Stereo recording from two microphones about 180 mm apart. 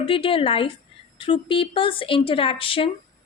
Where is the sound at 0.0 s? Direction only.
30° left (ahead or behind).